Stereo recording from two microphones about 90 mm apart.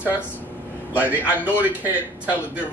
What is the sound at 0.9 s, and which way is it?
Speech, 15° right (ahead or behind).